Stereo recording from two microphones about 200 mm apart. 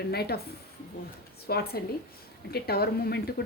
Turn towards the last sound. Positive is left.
turn(degrees=50)  # may be behind; listen again after turning